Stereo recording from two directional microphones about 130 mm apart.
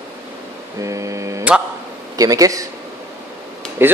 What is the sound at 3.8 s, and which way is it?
Speech, 15° right (ahead or behind).